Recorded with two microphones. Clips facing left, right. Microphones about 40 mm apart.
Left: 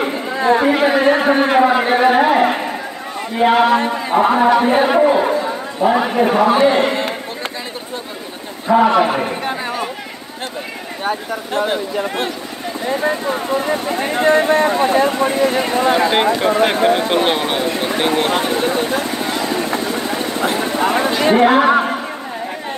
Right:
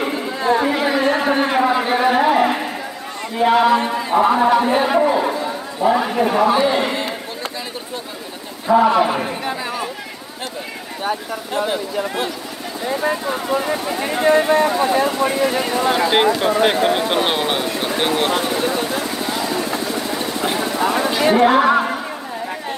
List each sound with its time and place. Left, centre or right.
0.4 s speech: left
4.9 s a man's voice: left
8.7 s speech: left
11.1 s speech: left
13.8 s speech: left
17.1 s speech: centre
18.1 s vehicle: left